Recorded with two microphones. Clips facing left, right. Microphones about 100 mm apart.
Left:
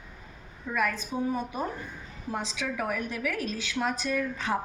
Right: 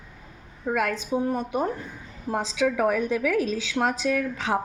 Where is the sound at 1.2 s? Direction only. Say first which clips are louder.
Right 5 dB; 65° right (ahead or behind).